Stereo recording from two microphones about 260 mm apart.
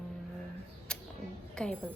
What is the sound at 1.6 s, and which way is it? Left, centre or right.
Speech, centre.